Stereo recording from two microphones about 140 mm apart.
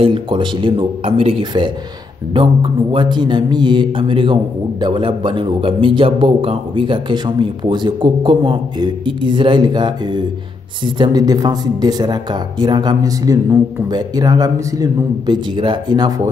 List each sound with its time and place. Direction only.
0.0 s mantra: 35° right (ahead or behind)
10.8 s speech: 35° right (ahead or behind)